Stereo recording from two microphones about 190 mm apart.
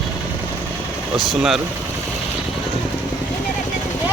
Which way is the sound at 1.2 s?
Centre (ahead or behind).